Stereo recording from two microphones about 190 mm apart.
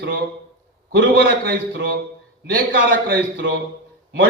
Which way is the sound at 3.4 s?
80° right.